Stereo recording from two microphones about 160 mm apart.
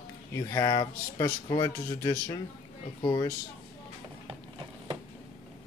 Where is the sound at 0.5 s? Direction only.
25° left (ahead or behind).